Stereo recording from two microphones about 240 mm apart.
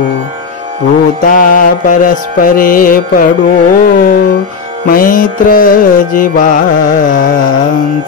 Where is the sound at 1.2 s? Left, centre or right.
Left.